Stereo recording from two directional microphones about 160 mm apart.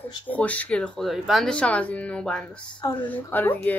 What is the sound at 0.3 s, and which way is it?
Speech, 10° left (ahead or behind).